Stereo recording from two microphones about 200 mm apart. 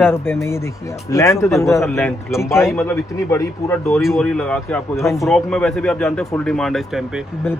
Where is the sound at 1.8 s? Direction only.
Centre (ahead or behind).